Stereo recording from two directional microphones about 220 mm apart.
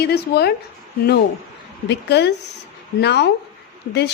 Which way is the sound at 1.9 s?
50° left (ahead or behind).